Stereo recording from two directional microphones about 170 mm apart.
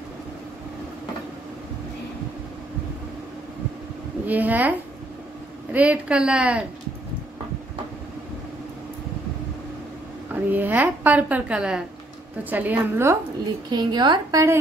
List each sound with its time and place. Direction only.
4.3 s a woman's voice: 10° right (ahead or behind)
10.3 s a woman's voice: 10° right (ahead or behind)
13.7 s a woman's voice: 25° right (ahead or behind)